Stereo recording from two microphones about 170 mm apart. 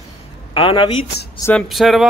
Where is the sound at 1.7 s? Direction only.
Centre (ahead or behind).